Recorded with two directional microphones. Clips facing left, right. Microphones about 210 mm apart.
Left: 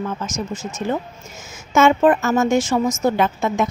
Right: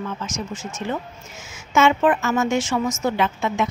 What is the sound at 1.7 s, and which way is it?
A woman's voice, 40° left (ahead or behind).